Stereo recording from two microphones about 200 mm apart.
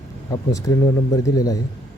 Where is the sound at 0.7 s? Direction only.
20° left (ahead or behind).